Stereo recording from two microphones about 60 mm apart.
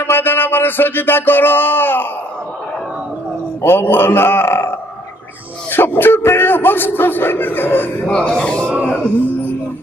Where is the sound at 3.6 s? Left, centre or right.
Left.